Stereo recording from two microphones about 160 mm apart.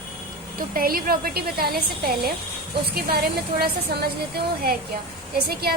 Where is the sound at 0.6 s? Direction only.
65° right (ahead or behind).